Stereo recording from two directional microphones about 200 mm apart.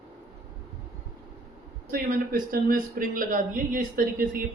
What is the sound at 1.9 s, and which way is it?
Speech, 45° right (ahead or behind).